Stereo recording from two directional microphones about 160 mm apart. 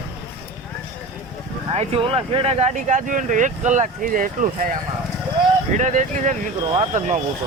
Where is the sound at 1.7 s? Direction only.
35° right (ahead or behind); by 4.7 s 60° right (ahead or behind).